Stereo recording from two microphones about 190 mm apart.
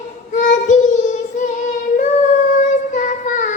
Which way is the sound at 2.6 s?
40° left (ahead or behind).